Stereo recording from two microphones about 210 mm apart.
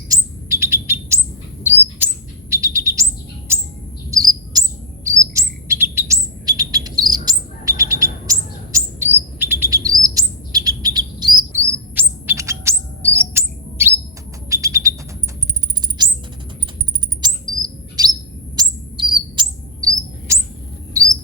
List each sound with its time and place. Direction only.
0.1 s bird: 10° right (ahead or behind)
2.7 s bird: 15° right (ahead or behind)
4.1 s chirp: 20° right (ahead or behind)
14.5 s bird: 15° right (ahead or behind)
16.0 s rodents: 20° right (ahead or behind)
17.2 s chirp: 20° right (ahead or behind)
18.5 s bird: 20° right (ahead or behind)
20.9 s a sound: 15° right (ahead or behind)